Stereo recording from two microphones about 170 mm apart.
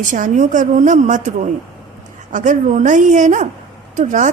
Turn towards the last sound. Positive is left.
turn(degrees=-45)  # may be behind; listen again after turning